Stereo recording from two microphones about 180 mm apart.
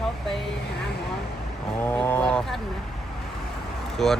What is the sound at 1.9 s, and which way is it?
Honk, 10° left (ahead or behind).